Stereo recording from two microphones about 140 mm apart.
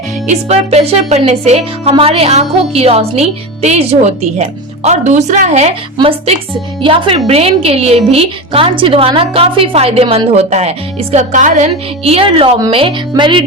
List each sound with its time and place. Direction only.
0.3 s speech: 50° right (ahead or behind); by 13.4 s 35° right (ahead or behind)